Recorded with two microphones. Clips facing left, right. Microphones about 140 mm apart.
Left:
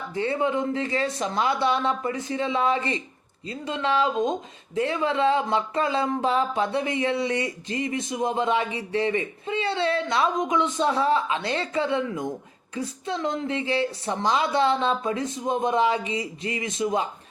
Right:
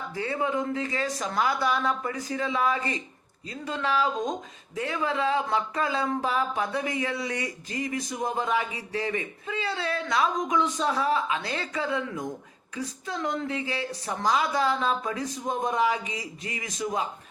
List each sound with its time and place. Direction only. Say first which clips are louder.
0.1 s speech: left 4 dB; 25° left (ahead or behind)